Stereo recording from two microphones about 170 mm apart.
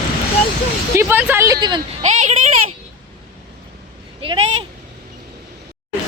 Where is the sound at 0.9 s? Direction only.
10° right (ahead or behind).